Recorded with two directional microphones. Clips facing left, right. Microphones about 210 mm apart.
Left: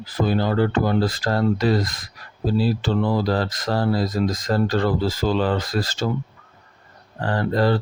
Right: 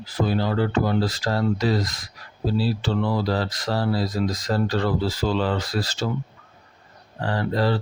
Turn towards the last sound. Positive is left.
turn(degrees=50)  # may be behind; listen again after turning